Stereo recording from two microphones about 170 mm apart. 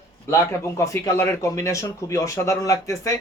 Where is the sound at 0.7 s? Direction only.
15° left (ahead or behind).